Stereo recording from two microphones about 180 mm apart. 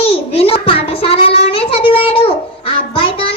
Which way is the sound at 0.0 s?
30° left (ahead or behind).